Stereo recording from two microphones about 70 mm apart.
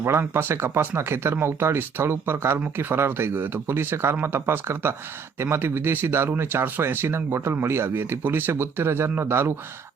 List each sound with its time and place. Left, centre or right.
0.0 s speech: right